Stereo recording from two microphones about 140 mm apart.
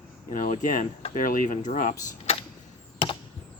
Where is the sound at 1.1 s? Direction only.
75° left (ahead or behind).